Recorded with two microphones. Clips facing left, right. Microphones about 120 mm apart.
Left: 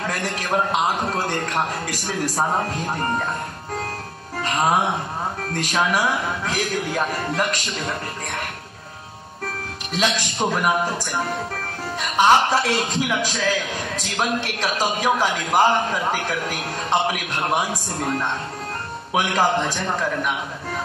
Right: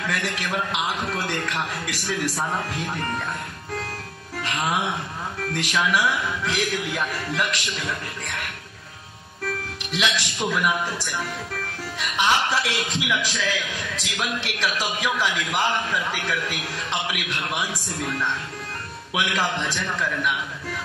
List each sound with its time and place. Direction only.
0.0 s a man's voice: 40° left (ahead or behind)
4.4 s a man's voice: 40° left (ahead or behind)
9.9 s a man's voice: 40° left (ahead or behind)